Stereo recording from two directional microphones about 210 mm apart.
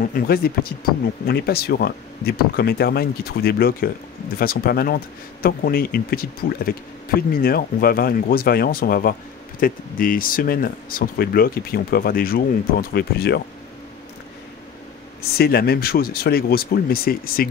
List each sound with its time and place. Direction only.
0.1 s speech: 45° left (ahead or behind)
15.3 s speech: 45° left (ahead or behind)